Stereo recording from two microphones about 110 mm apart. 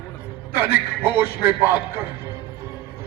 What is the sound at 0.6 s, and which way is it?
A man's voice, 20° right (ahead or behind).